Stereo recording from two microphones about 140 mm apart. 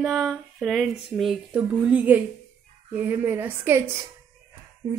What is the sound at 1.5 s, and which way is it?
A woman's voice, 10° right (ahead or behind).